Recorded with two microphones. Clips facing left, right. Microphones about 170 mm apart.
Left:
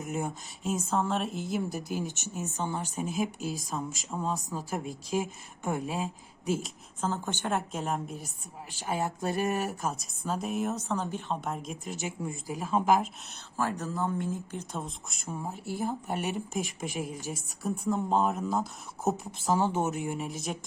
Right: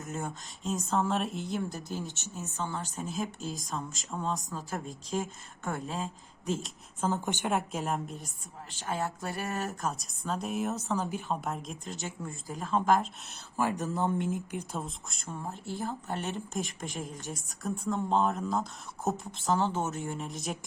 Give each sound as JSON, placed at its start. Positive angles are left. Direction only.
{"t": 0.0, "sound": "speech", "side_deg": 10}
{"t": 0.6, "sound": "speech", "side_deg": 0}
{"t": 7.0, "sound": "a woman's voice", "side_deg": -15}
{"t": 7.5, "sound": "speech", "side_deg": 0}
{"t": 9.8, "sound": "speech", "side_deg": 0}
{"t": 12.0, "sound": "speech", "side_deg": 15}
{"t": 13.6, "sound": "speech", "side_deg": -15}
{"t": 14.8, "sound": "speech", "side_deg": 0}